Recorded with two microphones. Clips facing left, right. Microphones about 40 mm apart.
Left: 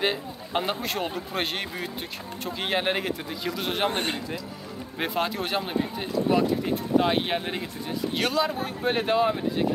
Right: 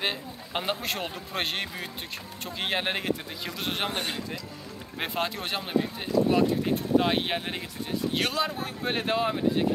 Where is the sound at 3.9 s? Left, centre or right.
Left.